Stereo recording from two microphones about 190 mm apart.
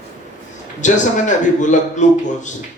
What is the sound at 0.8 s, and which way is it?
A man's voice, 40° left (ahead or behind).